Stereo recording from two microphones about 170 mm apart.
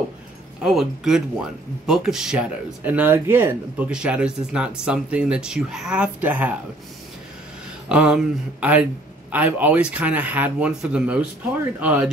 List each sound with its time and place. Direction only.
0.7 s speech: centre (ahead or behind)
7.9 s speech: 5° right (ahead or behind)